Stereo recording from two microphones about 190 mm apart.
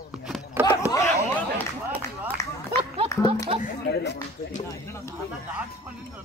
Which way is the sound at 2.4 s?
15° left (ahead or behind).